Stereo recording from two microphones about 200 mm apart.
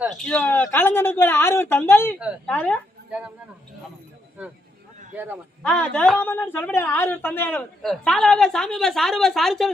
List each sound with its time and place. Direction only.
0.0 s speech: centre (ahead or behind)
3.1 s speech: 5° right (ahead or behind)
5.1 s a man's voice: 10° right (ahead or behind)
5.6 s a woman's voice: 5° left (ahead or behind)